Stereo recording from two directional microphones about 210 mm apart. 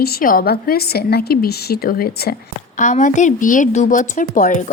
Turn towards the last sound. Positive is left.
turn(degrees=35)  # may be behind; listen again after turning